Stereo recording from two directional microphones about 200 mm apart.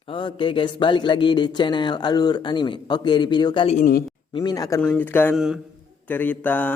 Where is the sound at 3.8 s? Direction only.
45° left (ahead or behind).